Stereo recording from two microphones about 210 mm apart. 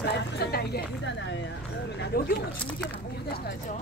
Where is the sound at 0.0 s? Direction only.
50° left (ahead or behind).